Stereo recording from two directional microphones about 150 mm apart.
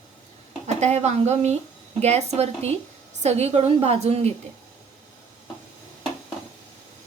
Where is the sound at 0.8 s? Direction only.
50° right (ahead or behind).